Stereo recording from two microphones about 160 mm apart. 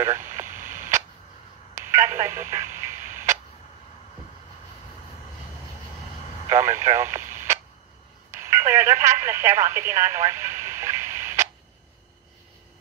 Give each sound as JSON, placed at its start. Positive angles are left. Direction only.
{"t": 0.0, "sound": "a sound", "side_deg": -15}
{"t": 1.8, "sound": "telephone", "side_deg": -15}
{"t": 6.5, "sound": "radio", "side_deg": -15}
{"t": 8.3, "sound": "telephone", "side_deg": -15}